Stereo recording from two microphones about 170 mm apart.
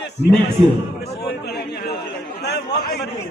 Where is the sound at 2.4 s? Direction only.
75° left (ahead or behind).